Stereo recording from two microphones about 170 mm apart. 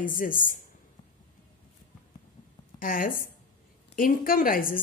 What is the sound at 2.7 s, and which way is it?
A woman's voice, 55° left (ahead or behind).